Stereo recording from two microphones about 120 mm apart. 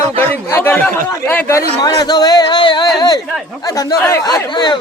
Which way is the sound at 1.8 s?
35° left (ahead or behind).